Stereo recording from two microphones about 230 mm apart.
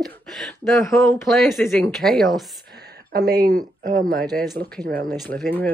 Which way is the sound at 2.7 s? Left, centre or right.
Right.